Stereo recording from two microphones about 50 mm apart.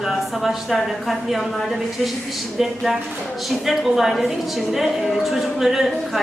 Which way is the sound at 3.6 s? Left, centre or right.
Centre.